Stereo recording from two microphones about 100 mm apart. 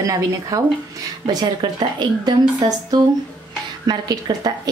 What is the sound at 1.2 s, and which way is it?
A woman's voice, 50° right (ahead or behind).